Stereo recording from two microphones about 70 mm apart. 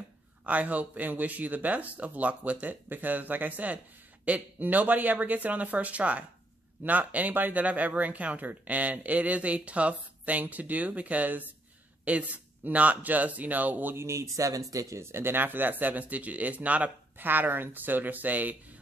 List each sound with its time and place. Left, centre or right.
0.5 s speech: right
13.9 s speech: right